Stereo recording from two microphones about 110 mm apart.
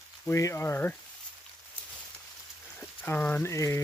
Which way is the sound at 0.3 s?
25° left (ahead or behind).